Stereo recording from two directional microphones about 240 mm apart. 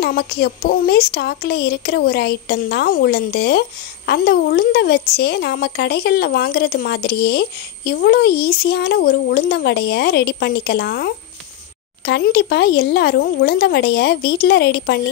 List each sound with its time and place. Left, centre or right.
0.0 s a woman's voice: left